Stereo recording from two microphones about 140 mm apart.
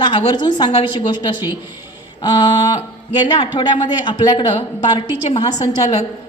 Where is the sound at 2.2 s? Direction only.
30° left (ahead or behind).